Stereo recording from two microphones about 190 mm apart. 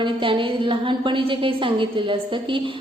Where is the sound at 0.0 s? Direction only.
25° right (ahead or behind).